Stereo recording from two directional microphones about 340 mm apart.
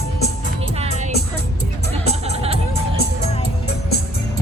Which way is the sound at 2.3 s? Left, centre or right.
Centre.